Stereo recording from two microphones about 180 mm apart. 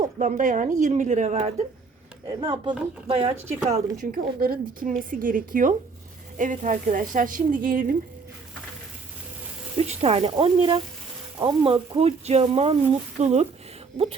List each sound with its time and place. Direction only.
0.0 s a woman's voice: 45° right (ahead or behind)
2.2 s speech: 25° right (ahead or behind)
3.9 s speech: 50° right (ahead or behind)
9.7 s speech: 35° right (ahead or behind)